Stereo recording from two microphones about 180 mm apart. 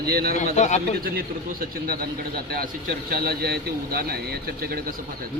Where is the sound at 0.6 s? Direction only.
40° left (ahead or behind).